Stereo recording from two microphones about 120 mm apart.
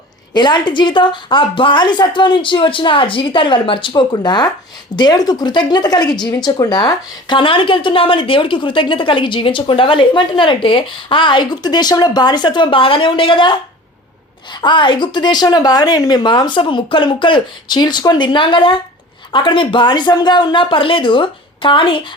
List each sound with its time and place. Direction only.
0.3 s speech: 40° left (ahead or behind)